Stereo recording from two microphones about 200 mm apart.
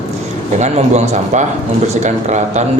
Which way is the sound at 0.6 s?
35° right (ahead or behind).